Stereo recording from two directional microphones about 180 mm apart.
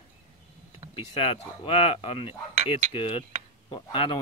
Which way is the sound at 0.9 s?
30° left (ahead or behind).